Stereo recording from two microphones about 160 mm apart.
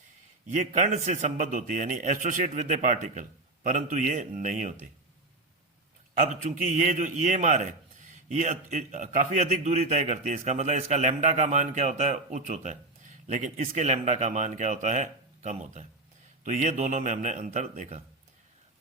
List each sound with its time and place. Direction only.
0.4 s a man's voice: 50° right (ahead or behind)
6.1 s a man's voice: 50° right (ahead or behind)